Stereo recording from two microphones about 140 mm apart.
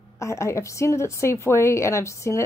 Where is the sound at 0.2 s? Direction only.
20° left (ahead or behind).